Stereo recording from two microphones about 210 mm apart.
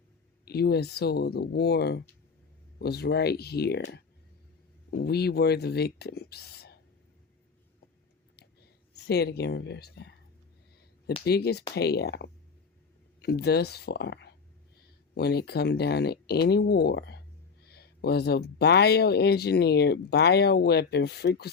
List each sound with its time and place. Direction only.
0.4 s speech: 50° left (ahead or behind)
8.9 s speech: 50° left (ahead or behind)
11.3 s speech: 50° left (ahead or behind)